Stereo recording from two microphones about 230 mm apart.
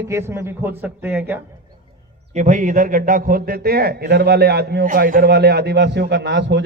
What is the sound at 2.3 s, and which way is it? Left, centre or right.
A man's voice, right.